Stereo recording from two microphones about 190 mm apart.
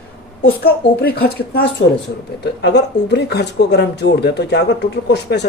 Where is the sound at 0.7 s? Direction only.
55° left (ahead or behind).